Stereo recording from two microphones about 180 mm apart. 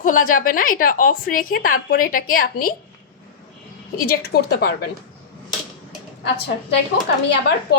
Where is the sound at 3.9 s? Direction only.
55° left (ahead or behind).